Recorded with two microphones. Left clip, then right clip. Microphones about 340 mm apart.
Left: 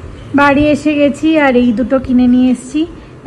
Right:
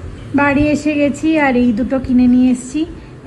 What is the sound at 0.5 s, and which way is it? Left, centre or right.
A woman's voice, centre.